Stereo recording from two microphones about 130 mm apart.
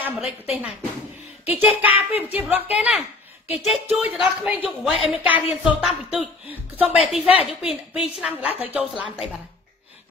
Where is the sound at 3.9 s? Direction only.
10° right (ahead or behind).